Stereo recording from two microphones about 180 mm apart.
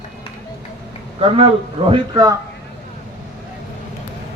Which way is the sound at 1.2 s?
30° right (ahead or behind).